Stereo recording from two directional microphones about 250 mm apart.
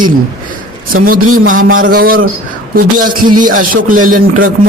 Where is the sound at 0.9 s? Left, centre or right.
Right.